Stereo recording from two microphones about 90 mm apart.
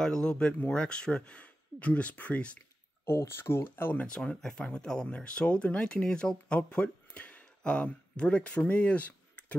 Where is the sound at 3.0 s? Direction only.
30° left (ahead or behind).